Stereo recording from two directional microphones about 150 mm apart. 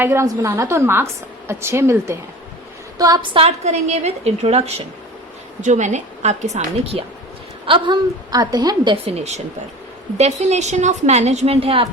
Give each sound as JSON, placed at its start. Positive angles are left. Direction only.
{"t": 0.0, "sound": "a woman's voice", "side_deg": -15}
{"t": 3.0, "sound": "a woman's voice", "side_deg": -30}
{"t": 5.6, "sound": "a woman's voice", "side_deg": -55}
{"t": 7.6, "sound": "a woman's voice", "side_deg": -35}
{"t": 10.2, "sound": "a woman's voice", "side_deg": -50}